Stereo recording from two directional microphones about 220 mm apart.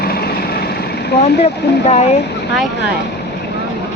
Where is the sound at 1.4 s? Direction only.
30° left (ahead or behind).